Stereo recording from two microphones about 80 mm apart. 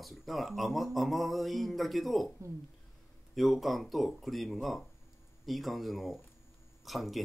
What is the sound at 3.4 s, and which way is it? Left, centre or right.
Speech, centre.